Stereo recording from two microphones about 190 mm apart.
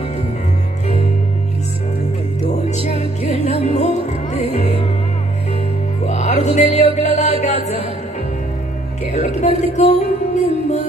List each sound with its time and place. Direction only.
2.9 s music: 35° left (ahead or behind)
6.0 s music: 35° left (ahead or behind)
9.1 s music: 35° left (ahead or behind)